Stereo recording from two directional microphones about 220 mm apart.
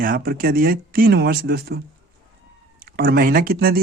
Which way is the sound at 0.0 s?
40° right (ahead or behind).